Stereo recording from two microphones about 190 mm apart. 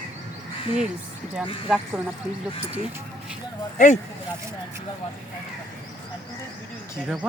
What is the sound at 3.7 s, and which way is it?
Speech, 40° left (ahead or behind).